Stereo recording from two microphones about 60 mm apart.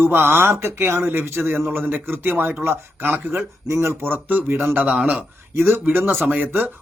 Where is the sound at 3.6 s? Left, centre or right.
Right.